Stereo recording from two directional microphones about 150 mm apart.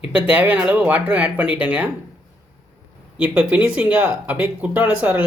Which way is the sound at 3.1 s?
10° right (ahead or behind).